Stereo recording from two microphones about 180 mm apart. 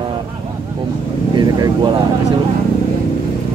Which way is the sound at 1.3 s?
20° right (ahead or behind).